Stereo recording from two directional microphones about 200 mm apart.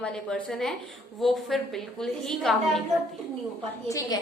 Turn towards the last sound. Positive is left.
turn(degrees=15)  # may be behind; listen again after turning